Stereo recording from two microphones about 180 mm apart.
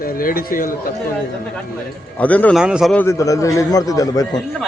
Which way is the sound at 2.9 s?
15° left (ahead or behind).